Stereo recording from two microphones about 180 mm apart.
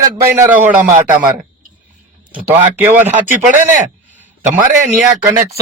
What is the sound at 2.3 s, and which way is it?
Speech, 10° right (ahead or behind).